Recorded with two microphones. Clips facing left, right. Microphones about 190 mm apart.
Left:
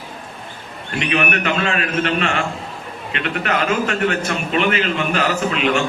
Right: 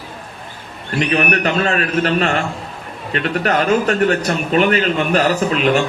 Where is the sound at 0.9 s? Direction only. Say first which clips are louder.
Right 3 dB; 40° right (ahead or behind).